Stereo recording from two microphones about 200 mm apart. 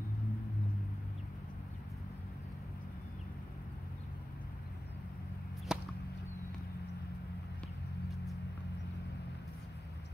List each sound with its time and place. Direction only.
5.7 s whip: 5° right (ahead or behind)